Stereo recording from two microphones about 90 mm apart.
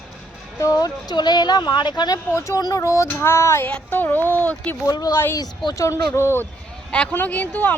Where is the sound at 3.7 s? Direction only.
20° left (ahead or behind).